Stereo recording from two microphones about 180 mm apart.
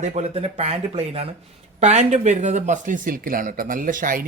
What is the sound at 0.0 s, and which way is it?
Speech, 40° right (ahead or behind).